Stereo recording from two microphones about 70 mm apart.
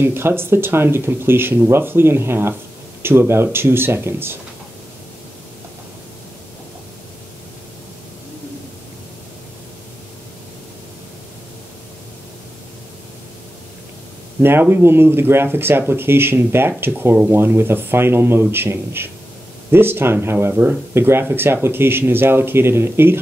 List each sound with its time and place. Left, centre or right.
0.0 s speech: right
14.4 s speech: right